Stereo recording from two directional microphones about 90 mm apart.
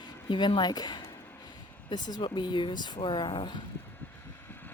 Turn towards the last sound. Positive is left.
turn(degrees=65)  # may be behind; listen again after turning